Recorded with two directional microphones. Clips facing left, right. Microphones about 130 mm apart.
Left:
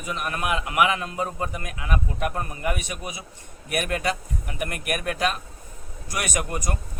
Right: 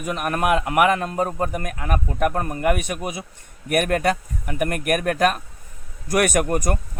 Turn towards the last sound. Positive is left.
turn(degrees=-55)  # may be behind; listen again after turning